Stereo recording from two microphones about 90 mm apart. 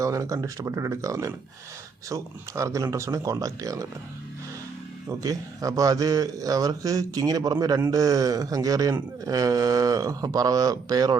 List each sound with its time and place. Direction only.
0.0 s a man's voice: 35° right (ahead or behind)
5.0 s a man's voice: 40° right (ahead or behind)